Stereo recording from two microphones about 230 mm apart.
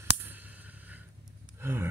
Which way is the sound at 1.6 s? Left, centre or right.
Centre.